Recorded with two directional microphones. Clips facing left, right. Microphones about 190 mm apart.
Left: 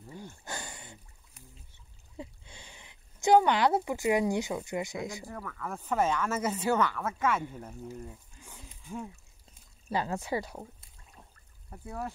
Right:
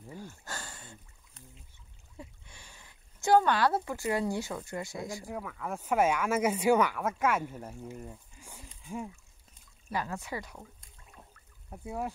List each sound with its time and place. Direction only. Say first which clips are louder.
0.2 s a sound: left 4 dB; 15° left (ahead or behind)
2.1 s speech: left 5 dB; 20° left (ahead or behind)
5.2 s speech: right 2 dB; 10° right (ahead or behind)
9.8 s speech: left 4 dB; 30° left (ahead or behind)
11.7 s speech: right 2 dB; 15° right (ahead or behind)